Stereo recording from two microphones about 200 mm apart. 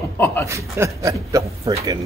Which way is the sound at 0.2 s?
10° left (ahead or behind).